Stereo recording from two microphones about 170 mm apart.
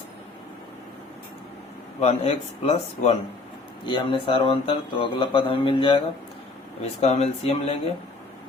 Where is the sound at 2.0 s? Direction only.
35° left (ahead or behind).